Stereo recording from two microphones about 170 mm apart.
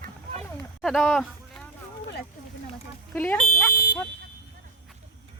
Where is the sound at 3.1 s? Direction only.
10° left (ahead or behind).